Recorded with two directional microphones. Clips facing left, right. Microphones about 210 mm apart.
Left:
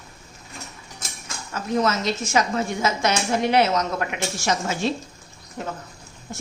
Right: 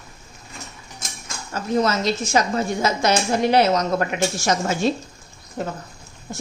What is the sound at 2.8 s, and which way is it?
A woman's voice, 35° right (ahead or behind).